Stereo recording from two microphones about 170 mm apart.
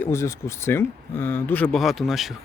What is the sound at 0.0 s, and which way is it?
Speech, 15° left (ahead or behind).